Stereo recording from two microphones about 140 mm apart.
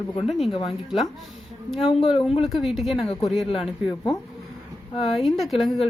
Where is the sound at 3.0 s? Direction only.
45° left (ahead or behind).